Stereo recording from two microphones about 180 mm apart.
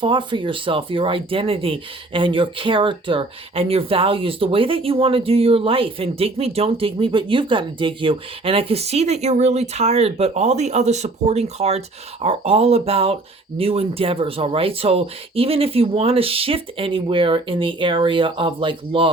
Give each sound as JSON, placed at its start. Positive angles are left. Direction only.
{"t": 0.0, "sound": "speech", "side_deg": -25}